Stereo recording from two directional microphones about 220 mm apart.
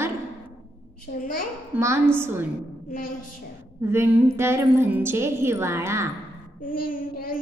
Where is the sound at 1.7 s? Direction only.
10° right (ahead or behind).